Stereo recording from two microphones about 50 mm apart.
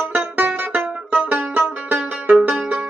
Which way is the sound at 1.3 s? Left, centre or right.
Right.